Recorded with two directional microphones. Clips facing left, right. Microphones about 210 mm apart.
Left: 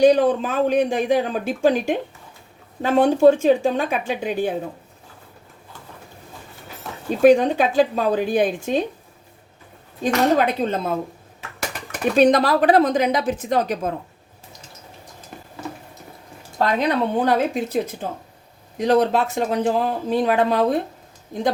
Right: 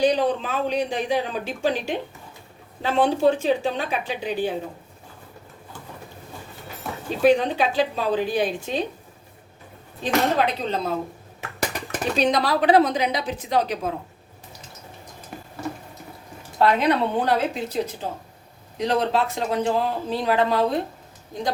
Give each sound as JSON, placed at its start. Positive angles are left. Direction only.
{"t": 0.0, "sound": "speech", "side_deg": 50}
{"t": 7.2, "sound": "speech", "side_deg": 45}
{"t": 10.0, "sound": "speech", "side_deg": 50}
{"t": 12.1, "sound": "speech", "side_deg": 50}
{"t": 16.6, "sound": "speech", "side_deg": 45}